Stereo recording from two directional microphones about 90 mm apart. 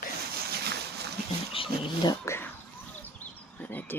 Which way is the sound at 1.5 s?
80° left.